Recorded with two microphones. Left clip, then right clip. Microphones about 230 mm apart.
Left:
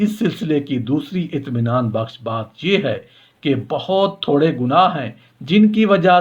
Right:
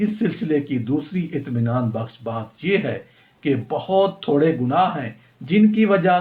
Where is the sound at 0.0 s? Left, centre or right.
Left.